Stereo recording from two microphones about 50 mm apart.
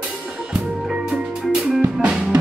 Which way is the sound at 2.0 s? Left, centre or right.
Centre.